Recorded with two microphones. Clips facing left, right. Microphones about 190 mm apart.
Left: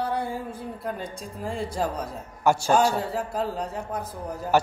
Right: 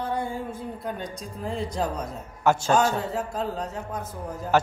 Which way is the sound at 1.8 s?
10° left (ahead or behind).